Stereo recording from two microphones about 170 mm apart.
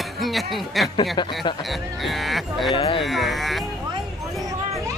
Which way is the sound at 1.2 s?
25° left (ahead or behind).